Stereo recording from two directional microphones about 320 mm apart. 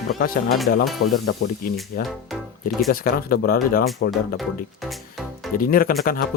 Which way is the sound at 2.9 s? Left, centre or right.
Left.